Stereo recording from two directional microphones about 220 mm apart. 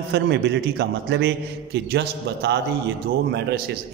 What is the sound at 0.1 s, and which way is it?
A man's voice, 50° right (ahead or behind).